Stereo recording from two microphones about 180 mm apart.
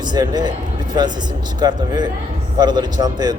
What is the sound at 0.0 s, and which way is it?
Speech, 25° right (ahead or behind).